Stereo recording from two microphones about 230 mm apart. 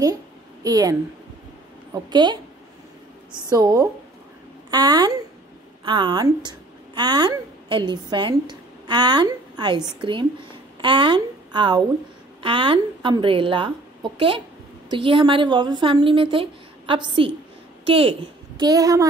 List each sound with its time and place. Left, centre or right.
0.7 s a woman's voice: centre
2.0 s a woman's voice: centre
14.9 s a woman's voice: right